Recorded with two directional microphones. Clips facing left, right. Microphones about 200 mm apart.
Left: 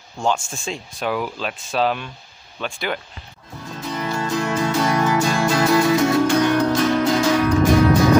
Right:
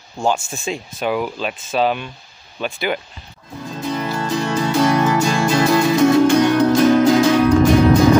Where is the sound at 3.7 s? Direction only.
20° right (ahead or behind).